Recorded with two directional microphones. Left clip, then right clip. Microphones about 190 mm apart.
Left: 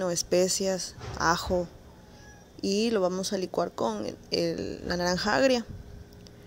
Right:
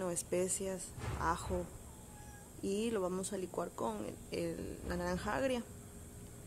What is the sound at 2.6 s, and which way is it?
Speech, 25° left (ahead or behind).